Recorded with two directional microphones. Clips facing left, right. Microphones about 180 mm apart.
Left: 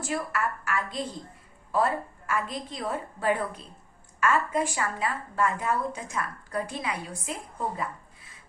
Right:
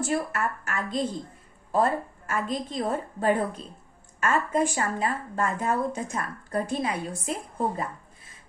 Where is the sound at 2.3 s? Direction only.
40° right (ahead or behind).